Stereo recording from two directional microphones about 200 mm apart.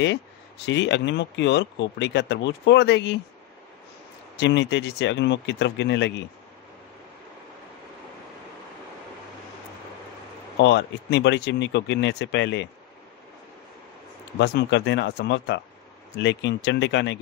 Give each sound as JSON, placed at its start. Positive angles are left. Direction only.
{"t": 0.7, "sound": "speech", "side_deg": 60}
{"t": 4.4, "sound": "speech", "side_deg": 60}
{"t": 10.6, "sound": "speech", "side_deg": 60}
{"t": 14.4, "sound": "speech", "side_deg": 55}